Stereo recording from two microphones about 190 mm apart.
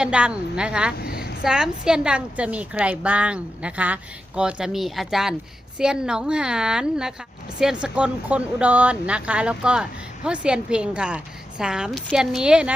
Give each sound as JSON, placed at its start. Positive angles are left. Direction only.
{"t": 0.0, "sound": "a woman's voice", "side_deg": -5}
{"t": 0.9, "sound": "a sound", "side_deg": 55}
{"t": 1.4, "sound": "a woman's voice", "side_deg": -5}